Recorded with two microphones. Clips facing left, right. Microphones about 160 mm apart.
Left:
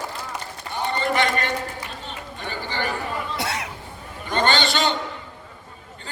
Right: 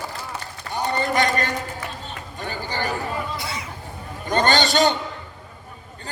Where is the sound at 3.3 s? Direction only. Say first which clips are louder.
Left 3 dB; 75° left (ahead or behind).